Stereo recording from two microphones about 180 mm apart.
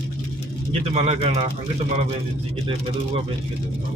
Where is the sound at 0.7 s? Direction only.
35° right (ahead or behind).